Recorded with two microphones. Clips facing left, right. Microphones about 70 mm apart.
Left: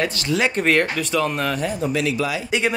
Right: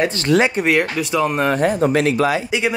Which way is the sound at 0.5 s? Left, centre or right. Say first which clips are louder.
Right 1 dB; centre.